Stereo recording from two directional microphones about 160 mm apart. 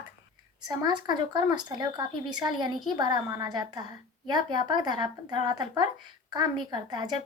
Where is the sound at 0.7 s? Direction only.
25° right (ahead or behind).